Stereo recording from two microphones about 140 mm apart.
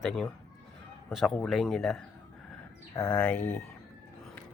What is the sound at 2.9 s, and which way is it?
Speech, 25° left (ahead or behind).